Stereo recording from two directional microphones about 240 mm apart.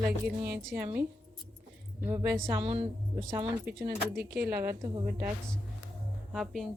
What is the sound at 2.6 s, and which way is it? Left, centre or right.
Speech, right.